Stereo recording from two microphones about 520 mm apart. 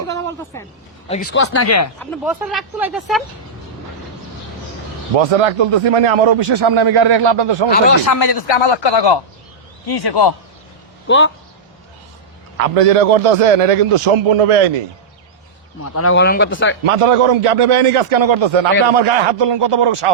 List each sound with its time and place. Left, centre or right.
0.1 s a sound: centre
1.0 s speech: centre
2.0 s speech: centre
5.1 s a man's voice: right
6.5 s speech: right
8.0 s speech: left
8.3 s speech: left
13.1 s a man's voice: right
15.8 s speech: left
16.8 s a man's voice: right
19.4 s a man's voice: right